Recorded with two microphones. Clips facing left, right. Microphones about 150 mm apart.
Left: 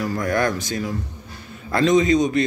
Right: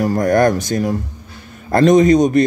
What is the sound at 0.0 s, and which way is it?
Speech, 40° right (ahead or behind).